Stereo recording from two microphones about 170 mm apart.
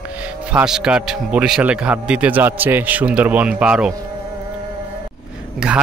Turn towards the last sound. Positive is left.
turn(degrees=-5)  # may be behind; listen again after turning